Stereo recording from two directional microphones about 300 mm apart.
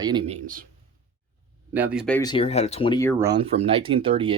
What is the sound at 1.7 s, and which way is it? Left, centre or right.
Speech, centre.